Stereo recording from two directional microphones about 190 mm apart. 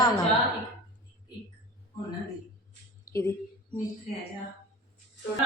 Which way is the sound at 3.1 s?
15° left (ahead or behind).